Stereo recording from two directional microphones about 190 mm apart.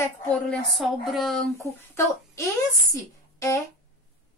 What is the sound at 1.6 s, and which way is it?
Speech, 15° left (ahead or behind).